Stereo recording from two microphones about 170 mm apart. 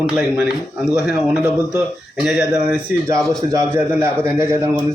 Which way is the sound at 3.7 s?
15° right (ahead or behind).